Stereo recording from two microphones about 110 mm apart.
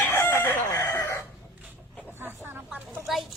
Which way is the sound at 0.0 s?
20° left (ahead or behind).